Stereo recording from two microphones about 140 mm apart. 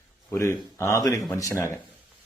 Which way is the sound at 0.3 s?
20° left (ahead or behind).